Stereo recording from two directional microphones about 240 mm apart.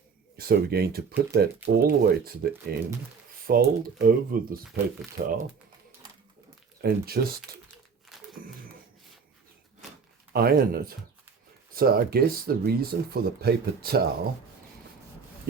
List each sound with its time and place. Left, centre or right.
0.3 s speech: right
6.8 s speech: right
8.1 s a sound: centre
10.3 s speech: right